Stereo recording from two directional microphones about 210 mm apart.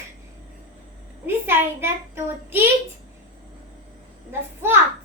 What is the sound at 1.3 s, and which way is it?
A child's voice, 10° right (ahead or behind).